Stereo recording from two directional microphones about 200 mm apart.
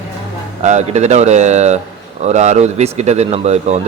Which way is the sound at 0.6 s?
35° right (ahead or behind).